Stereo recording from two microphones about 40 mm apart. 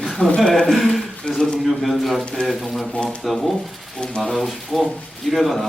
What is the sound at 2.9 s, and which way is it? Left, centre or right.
Speech, left.